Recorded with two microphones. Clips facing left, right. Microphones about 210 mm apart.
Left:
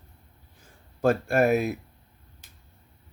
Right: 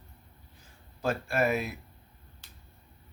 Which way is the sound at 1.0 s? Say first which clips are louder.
Left 7 dB; 50° left (ahead or behind).